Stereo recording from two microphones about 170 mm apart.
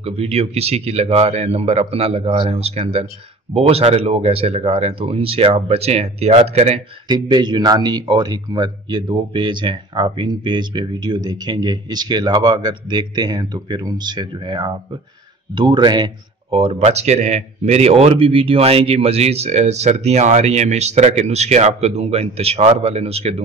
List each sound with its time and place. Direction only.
0.0 s speech: 35° right (ahead or behind)
7.1 s speech: 25° right (ahead or behind)